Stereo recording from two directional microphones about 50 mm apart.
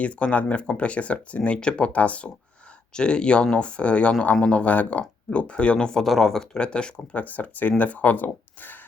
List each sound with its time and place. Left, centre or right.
0.0 s speech: left
7.2 s speech: left